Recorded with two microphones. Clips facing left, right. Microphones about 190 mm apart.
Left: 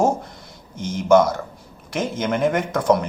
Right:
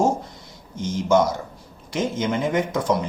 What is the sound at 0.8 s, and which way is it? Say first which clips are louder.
Speech: left 3 dB; 55° left (ahead or behind).